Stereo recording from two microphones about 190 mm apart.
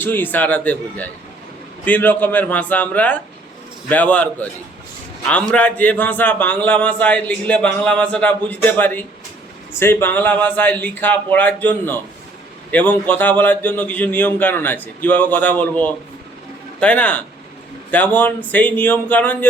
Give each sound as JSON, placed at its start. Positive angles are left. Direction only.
{"t": 0.0, "sound": "a man's voice", "side_deg": 10}
{"t": 5.5, "sound": "a man's voice", "side_deg": 5}